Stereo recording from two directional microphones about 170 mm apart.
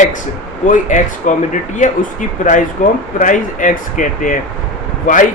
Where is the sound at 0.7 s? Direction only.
45° left (ahead or behind).